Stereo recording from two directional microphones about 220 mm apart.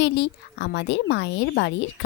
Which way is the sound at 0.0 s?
50° left (ahead or behind).